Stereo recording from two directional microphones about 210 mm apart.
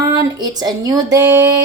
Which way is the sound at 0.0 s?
20° right (ahead or behind).